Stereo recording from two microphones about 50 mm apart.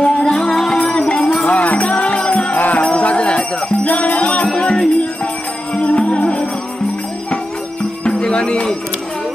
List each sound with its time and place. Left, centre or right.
0.0 s music: centre
1.6 s music: left
2.0 s music: centre
2.5 s music: left
3.0 s jingle bell: left
3.8 s music: left
8.0 s music: centre